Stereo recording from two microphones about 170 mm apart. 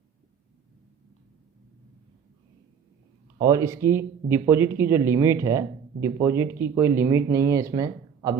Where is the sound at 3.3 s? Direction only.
20° right (ahead or behind).